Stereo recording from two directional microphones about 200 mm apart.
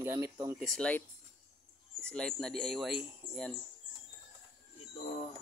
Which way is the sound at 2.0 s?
5° left (ahead or behind).